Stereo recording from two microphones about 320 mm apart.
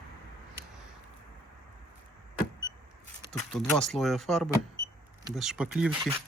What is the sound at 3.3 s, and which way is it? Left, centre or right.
Speech, centre.